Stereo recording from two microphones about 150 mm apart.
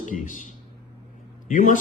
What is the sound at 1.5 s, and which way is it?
Speech, 55° left (ahead or behind).